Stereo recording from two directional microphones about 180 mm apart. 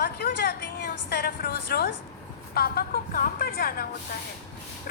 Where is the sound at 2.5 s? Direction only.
60° left (ahead or behind).